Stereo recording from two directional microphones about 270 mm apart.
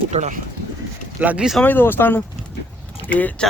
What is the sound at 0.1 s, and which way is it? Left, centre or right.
Speech, right.